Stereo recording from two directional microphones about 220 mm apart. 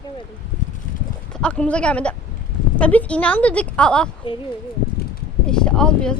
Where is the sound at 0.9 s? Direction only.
40° left (ahead or behind).